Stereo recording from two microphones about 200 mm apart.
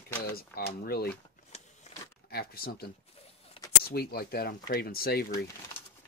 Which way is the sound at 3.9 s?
50° left (ahead or behind).